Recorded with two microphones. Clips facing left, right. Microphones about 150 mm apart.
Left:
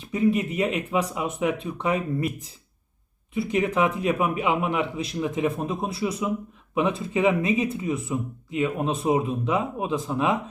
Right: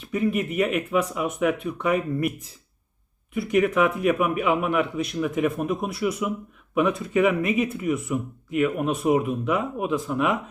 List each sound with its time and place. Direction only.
0.0 s speech: 30° left (ahead or behind)
3.3 s speech: 30° left (ahead or behind)